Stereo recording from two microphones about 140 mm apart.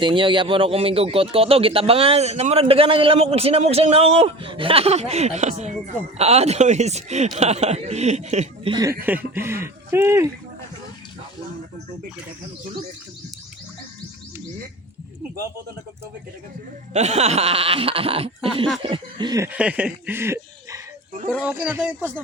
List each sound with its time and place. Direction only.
0.0 s speech: 35° right (ahead or behind); by 8.7 s 55° right (ahead or behind)
8.7 s speech: 25° right (ahead or behind)
16.9 s speech: 50° right (ahead or behind); by 19.4 s 35° right (ahead or behind)
19.4 s speech: 10° right (ahead or behind)